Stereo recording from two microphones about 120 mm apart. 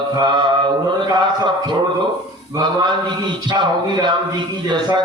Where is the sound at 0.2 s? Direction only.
40° right (ahead or behind).